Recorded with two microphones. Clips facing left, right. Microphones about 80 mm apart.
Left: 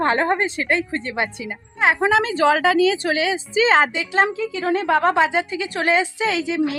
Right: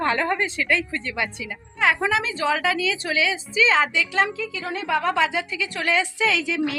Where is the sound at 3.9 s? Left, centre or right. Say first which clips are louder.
Left 3 dB; left.